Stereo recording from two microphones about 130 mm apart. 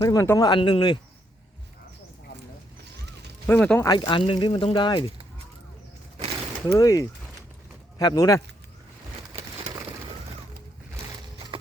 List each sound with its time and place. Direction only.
0.0 s speech: 25° left (ahead or behind)
3.4 s speech: 10° left (ahead or behind)
3.8 s speech: 30° left (ahead or behind)
6.7 s speech: 25° left (ahead or behind)
9.6 s a sound: 35° right (ahead or behind)
10.1 s music: 50° right (ahead or behind)